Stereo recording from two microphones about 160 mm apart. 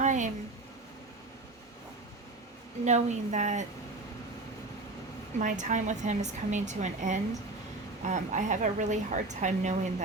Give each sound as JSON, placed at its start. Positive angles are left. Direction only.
{"t": 0.0, "sound": "a sound", "side_deg": -50}
{"t": 2.8, "sound": "a woman's voice", "side_deg": -45}
{"t": 5.4, "sound": "a woman's voice", "side_deg": -55}